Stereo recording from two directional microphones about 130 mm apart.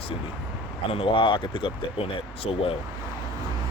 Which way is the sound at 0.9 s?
45° left (ahead or behind).